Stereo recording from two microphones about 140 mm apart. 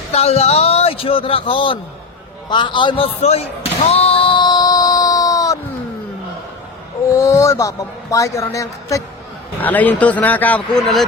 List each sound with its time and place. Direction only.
0.1 s a man's voice: 50° left (ahead or behind)
3.8 s a sound: 45° left (ahead or behind); by 5.5 s 25° left (ahead or behind)
7.2 s speech: 20° left (ahead or behind)
9.6 s speech: 10° left (ahead or behind)